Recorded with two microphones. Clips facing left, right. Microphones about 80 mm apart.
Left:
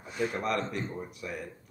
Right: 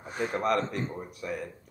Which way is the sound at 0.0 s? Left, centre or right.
Right.